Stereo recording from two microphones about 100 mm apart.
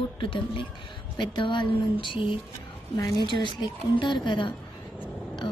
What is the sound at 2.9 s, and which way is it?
Speech, 35° left (ahead or behind).